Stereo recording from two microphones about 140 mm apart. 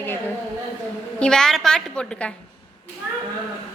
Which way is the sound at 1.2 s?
5° left (ahead or behind).